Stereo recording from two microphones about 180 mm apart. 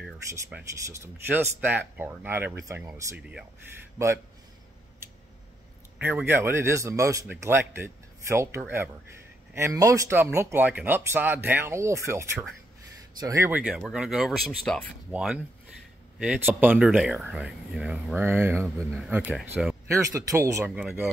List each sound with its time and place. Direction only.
0.5 s speech: 10° right (ahead or behind)
5.9 s speech: 10° right (ahead or behind)
19.9 s speech: 15° right (ahead or behind)